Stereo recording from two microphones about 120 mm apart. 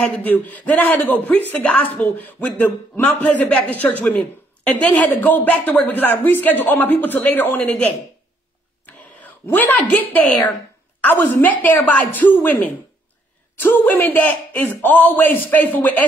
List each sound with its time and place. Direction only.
0.0 s a woman's voice: 10° left (ahead or behind)
8.8 s a sound: 15° left (ahead or behind)
11.1 s a woman's voice: 15° left (ahead or behind)